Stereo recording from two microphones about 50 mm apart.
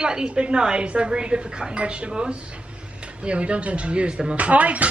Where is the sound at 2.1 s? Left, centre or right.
Centre.